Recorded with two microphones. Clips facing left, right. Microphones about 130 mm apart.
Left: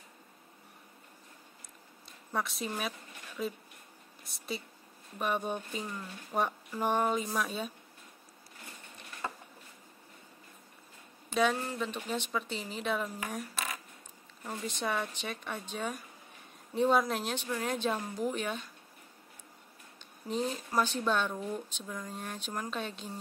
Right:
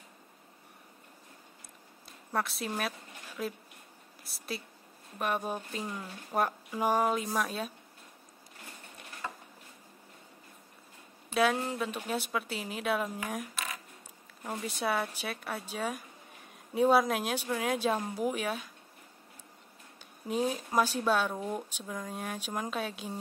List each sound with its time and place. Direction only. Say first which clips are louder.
2.0 s speech: right 2 dB; centre (ahead or behind)
11.5 s speech: right 2 dB; 10° right (ahead or behind)
14.6 s speech: right 2 dB; 10° right (ahead or behind)
20.2 s speech: right 3 dB; 10° right (ahead or behind)